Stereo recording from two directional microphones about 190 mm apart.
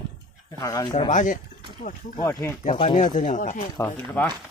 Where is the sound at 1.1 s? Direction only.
40° left (ahead or behind).